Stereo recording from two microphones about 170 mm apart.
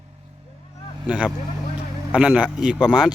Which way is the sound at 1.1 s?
10° right (ahead or behind).